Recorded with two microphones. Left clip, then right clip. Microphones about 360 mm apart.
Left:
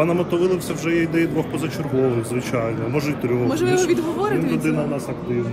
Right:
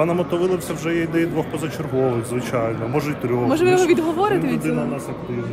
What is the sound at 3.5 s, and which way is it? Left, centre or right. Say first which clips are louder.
Speech: right 5 dB; right.